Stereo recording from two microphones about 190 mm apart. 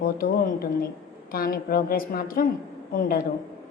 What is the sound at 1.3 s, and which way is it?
A woman's voice, 50° left (ahead or behind).